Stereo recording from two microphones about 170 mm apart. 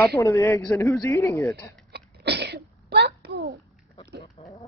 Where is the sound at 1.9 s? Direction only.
80° right.